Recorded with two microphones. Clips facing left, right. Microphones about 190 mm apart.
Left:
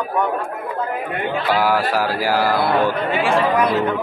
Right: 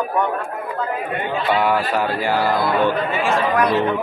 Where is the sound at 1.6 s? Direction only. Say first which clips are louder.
Left 1 dB; 5° left (ahead or behind).